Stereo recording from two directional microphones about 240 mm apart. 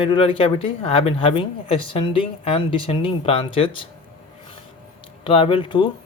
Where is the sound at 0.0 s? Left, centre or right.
Left.